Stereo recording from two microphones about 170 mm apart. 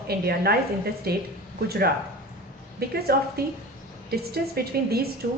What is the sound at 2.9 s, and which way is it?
A woman's voice, 65° right (ahead or behind).